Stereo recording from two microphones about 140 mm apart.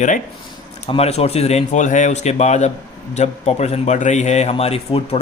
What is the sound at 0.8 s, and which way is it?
A man's voice, 45° left (ahead or behind).